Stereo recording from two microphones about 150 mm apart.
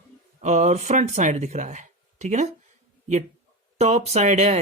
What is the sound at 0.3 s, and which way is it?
Speech, 50° right (ahead or behind).